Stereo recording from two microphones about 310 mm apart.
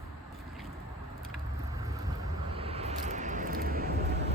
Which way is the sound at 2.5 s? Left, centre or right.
Centre.